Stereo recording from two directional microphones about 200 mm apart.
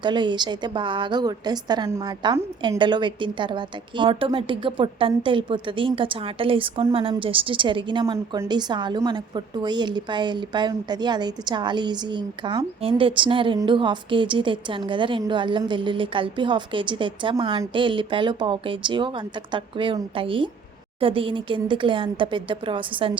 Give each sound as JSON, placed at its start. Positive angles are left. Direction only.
{"t": 0.0, "sound": "a woman's voice", "side_deg": -25}